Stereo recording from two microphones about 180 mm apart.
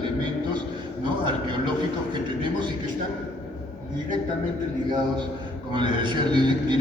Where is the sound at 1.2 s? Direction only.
25° right (ahead or behind).